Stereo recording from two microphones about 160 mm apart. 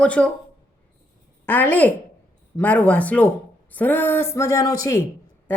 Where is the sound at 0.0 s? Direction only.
5° left (ahead or behind).